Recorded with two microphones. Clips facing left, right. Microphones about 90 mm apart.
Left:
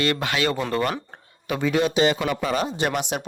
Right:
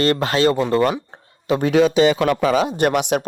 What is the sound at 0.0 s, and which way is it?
Speech, 35° right (ahead or behind).